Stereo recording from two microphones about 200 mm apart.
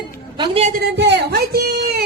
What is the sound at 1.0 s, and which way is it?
Speech, 55° right (ahead or behind).